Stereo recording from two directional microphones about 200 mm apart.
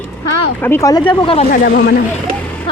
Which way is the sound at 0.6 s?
15° left (ahead or behind).